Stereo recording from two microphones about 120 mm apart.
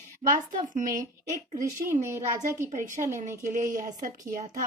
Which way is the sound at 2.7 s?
90° right.